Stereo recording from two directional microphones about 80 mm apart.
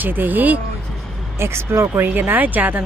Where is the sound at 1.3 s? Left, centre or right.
Right.